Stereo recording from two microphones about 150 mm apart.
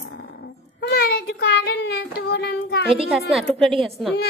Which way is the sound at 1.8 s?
90° left.